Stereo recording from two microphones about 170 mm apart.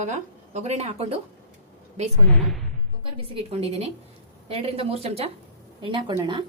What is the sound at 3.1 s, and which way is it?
Speech, 35° right (ahead or behind).